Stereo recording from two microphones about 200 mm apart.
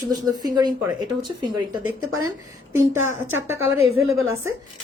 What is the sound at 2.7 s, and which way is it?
Speech, 10° right (ahead or behind).